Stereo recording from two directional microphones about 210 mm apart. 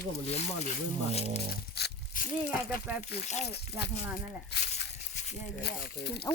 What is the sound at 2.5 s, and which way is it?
Speech, 5° right (ahead or behind).